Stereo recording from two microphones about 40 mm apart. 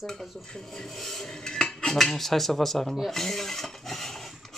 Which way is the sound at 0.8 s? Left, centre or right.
Centre.